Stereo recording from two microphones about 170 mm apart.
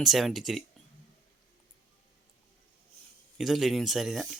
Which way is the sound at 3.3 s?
Centre (ahead or behind).